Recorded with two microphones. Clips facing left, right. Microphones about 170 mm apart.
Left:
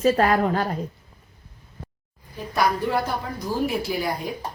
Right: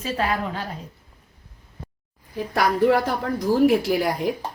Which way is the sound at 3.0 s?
90° right.